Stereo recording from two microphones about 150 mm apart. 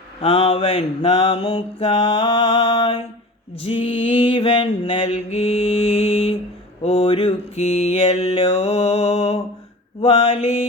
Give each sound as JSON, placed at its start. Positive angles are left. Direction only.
{"t": 0.2, "sound": "mantra", "side_deg": 40}